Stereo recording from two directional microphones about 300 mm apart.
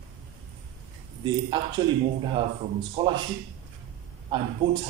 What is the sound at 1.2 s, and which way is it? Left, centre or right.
Speech, centre.